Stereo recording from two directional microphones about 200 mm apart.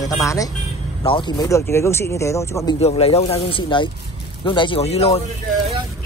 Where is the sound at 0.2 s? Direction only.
15° left (ahead or behind).